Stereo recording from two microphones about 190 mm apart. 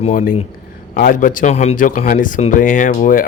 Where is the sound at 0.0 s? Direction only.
40° left (ahead or behind).